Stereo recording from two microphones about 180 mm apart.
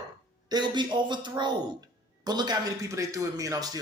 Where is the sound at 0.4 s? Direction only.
25° right (ahead or behind).